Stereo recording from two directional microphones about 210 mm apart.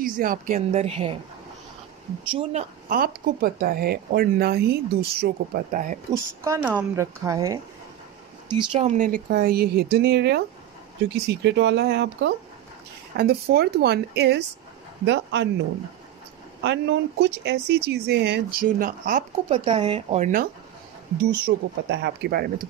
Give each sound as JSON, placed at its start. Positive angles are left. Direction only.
{"t": 0.0, "sound": "speech", "side_deg": -40}
{"t": 2.9, "sound": "speech", "side_deg": -45}
{"t": 6.1, "sound": "speech", "side_deg": -15}
{"t": 8.8, "sound": "speech", "side_deg": -40}
{"t": 16.6, "sound": "speech", "side_deg": -55}
{"t": 19.5, "sound": "speech", "side_deg": -25}
{"t": 21.2, "sound": "speech", "side_deg": -50}